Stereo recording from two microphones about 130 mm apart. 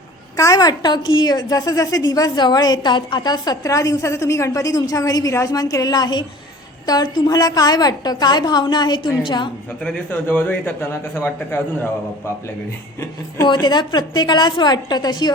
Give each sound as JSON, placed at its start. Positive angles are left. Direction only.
{"t": 0.3, "sound": "a woman's voice", "side_deg": 25}
{"t": 9.8, "sound": "a man's voice", "side_deg": 10}
{"t": 13.4, "sound": "a woman's voice", "side_deg": 35}